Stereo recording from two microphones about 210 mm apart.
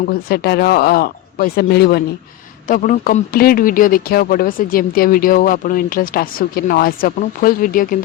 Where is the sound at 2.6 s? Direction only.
40° left (ahead or behind).